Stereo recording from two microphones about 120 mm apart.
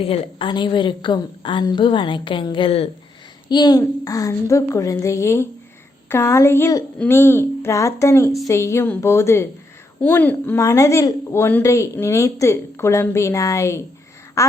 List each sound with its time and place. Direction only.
0.0 s a woman's voice: 50° left (ahead or behind)
3.5 s a woman's voice: 35° left (ahead or behind)